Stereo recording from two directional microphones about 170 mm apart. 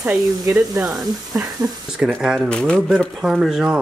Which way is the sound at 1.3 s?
15° right (ahead or behind).